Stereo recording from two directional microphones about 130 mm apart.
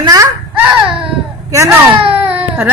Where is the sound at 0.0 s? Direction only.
30° right (ahead or behind).